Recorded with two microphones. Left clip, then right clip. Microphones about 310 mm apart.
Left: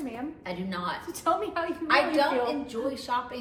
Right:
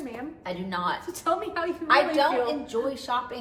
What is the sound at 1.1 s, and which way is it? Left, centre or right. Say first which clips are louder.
Speech: even; centre.